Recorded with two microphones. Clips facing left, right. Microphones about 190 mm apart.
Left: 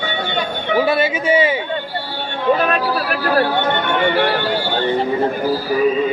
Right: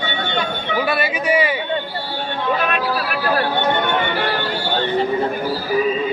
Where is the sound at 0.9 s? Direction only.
25° left (ahead or behind).